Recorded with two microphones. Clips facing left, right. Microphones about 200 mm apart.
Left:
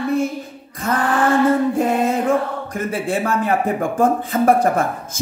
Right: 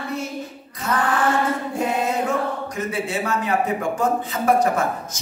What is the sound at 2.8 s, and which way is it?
Speech, 50° left (ahead or behind).